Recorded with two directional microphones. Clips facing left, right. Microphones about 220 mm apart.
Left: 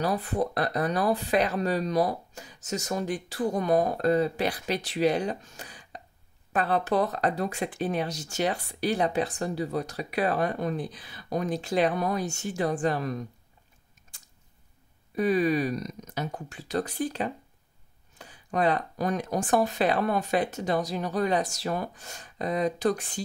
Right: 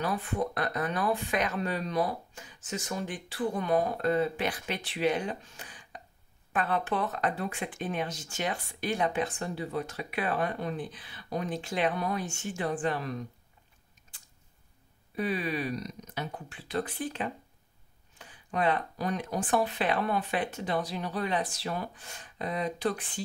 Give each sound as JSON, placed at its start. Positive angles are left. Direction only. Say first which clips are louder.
{"t": 0.0, "sound": "speech", "louder": "left 4 dB", "side_deg": 40}
{"t": 15.1, "sound": "speech", "louder": "left 7 dB", "side_deg": 45}